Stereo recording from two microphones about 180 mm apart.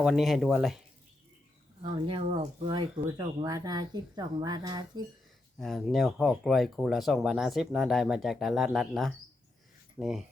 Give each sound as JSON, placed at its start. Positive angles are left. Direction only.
{"t": 0.0, "sound": "speech", "side_deg": 0}
{"t": 1.8, "sound": "speech", "side_deg": -30}
{"t": 5.5, "sound": "speech", "side_deg": 0}